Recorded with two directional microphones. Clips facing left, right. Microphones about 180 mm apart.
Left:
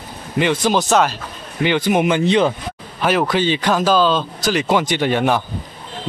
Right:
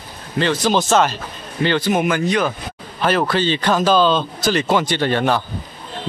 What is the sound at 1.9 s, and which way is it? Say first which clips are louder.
Speech: left 2 dB; 20° left (ahead or behind).